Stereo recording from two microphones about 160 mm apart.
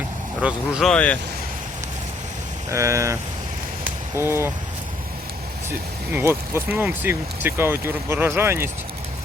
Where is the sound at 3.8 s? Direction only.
15° right (ahead or behind).